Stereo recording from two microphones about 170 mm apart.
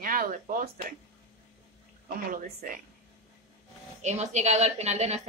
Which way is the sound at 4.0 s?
45° right (ahead or behind).